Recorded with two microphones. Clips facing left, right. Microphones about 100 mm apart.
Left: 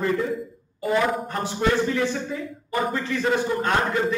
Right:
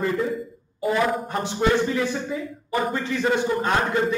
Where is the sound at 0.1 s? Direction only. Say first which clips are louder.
Even; centre (ahead or behind).